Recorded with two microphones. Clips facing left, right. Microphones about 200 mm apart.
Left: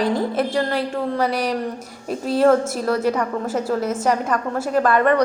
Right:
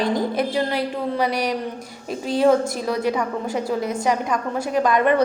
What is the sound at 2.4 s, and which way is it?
A woman's voice, 15° right (ahead or behind).